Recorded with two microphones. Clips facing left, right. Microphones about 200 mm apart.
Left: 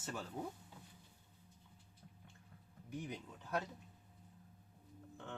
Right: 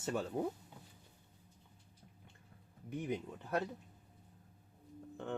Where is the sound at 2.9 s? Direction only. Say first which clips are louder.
Right 7 dB; 55° right (ahead or behind).